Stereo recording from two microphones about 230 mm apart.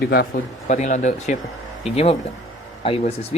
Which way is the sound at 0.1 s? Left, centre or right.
Left.